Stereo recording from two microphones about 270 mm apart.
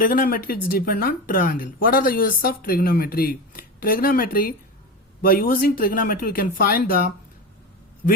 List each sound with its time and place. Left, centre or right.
0.0 s speech: left